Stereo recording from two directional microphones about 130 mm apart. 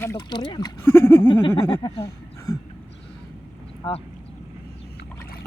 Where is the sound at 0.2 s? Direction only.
30° left (ahead or behind).